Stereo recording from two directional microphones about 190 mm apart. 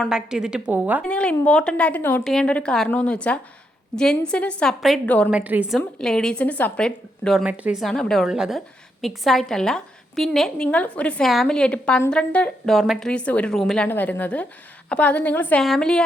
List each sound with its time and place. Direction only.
0.0 s a woman's voice: 5° right (ahead or behind)
1.0 s a woman's voice: 5° left (ahead or behind)
5.3 s a woman's voice: 10° right (ahead or behind)